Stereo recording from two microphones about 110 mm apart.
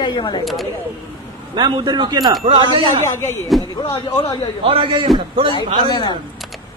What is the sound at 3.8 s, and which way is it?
Speech, 50° left (ahead or behind).